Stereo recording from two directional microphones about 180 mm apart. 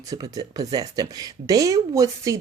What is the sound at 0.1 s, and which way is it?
Speech, 20° right (ahead or behind).